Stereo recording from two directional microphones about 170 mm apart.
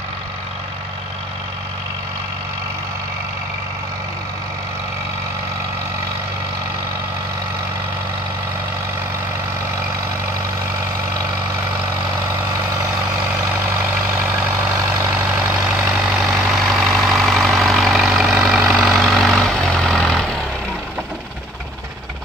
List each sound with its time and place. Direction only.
13.7 s vehicle: 10° right (ahead or behind)